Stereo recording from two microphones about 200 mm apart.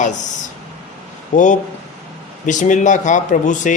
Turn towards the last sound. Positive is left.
turn(degrees=40)  # may be behind; listen again after turning